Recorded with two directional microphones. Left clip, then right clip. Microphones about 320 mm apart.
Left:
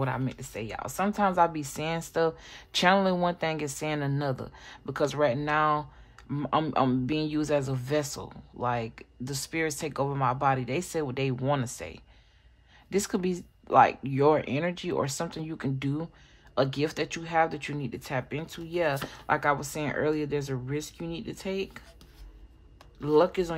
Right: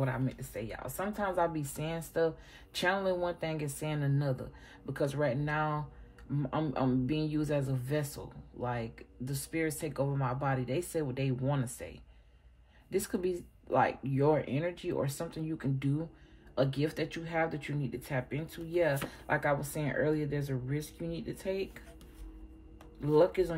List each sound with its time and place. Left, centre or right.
0.0 s speech: centre
23.0 s speech: centre